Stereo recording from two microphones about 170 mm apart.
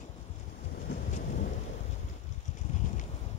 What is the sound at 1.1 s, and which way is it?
Thunder, 50° left (ahead or behind).